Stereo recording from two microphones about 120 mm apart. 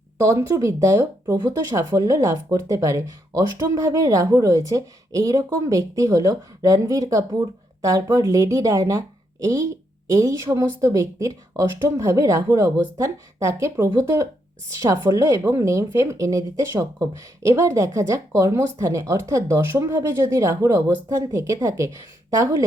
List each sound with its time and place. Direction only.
0.2 s speech: 25° right (ahead or behind)